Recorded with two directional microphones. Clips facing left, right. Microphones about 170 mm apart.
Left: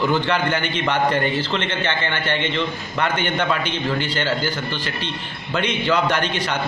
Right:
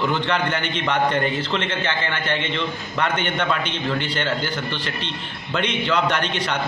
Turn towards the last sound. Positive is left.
turn(degrees=5)  # may be behind; listen again after turning